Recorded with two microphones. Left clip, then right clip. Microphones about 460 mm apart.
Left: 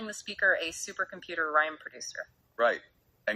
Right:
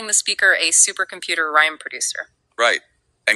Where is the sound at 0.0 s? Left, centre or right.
Left.